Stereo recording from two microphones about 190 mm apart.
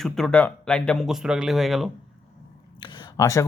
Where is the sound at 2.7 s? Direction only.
25° left (ahead or behind).